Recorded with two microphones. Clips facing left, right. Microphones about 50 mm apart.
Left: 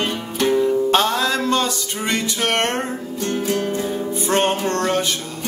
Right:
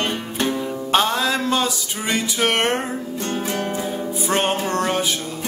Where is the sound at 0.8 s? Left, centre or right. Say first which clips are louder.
Left 1 dB; centre.